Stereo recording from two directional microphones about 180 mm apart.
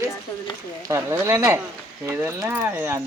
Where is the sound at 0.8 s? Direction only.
15° right (ahead or behind).